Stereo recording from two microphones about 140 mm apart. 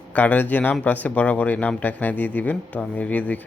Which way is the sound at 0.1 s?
10° left (ahead or behind).